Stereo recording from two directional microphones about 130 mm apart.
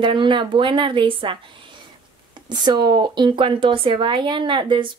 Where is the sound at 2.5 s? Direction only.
35° right (ahead or behind).